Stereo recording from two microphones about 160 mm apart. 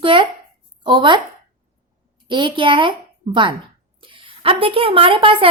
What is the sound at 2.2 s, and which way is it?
Speech, 30° right (ahead or behind).